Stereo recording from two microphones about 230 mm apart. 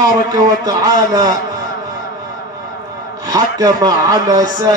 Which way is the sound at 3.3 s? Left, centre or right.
Centre.